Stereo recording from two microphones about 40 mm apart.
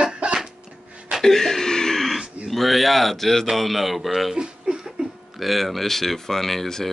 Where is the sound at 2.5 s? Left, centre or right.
Centre.